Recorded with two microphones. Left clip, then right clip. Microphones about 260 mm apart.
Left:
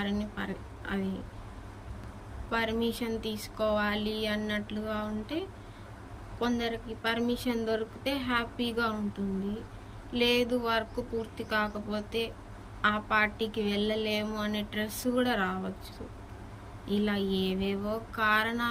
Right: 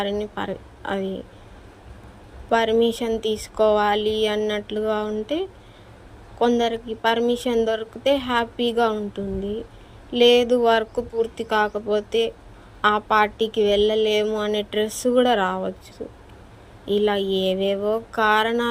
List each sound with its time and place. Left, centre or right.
0.0 s speech: centre
2.5 s speech: centre
16.8 s speech: centre